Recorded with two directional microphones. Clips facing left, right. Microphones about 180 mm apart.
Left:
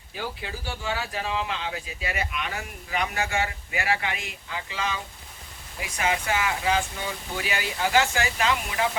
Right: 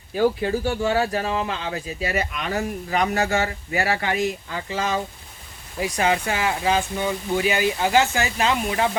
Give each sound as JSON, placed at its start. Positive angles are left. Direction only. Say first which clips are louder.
{"t": 0.2, "sound": "speech", "louder": "right 14 dB", "side_deg": -45}
{"t": 5.8, "sound": "speech", "louder": "right 6 dB", "side_deg": -35}